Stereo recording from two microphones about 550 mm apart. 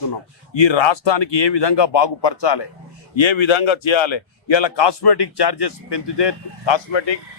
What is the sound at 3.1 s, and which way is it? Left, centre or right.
A man's voice, left.